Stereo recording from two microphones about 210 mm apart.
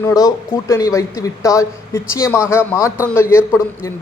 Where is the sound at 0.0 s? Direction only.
15° left (ahead or behind).